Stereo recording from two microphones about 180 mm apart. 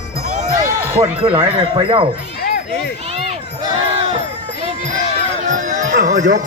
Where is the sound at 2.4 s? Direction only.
60° left (ahead or behind).